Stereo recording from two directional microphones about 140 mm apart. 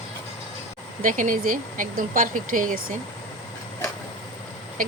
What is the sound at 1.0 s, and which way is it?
Speech, 70° right (ahead or behind).